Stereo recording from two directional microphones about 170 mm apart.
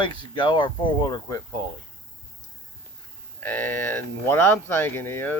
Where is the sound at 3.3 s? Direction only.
10° left (ahead or behind).